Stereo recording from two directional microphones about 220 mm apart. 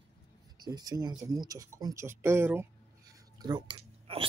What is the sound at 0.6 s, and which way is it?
Speech, 20° right (ahead or behind).